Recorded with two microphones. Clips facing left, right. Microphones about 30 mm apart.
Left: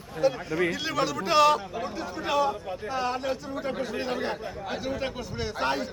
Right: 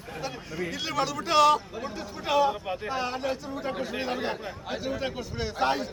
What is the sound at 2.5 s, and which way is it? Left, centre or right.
Speech, right.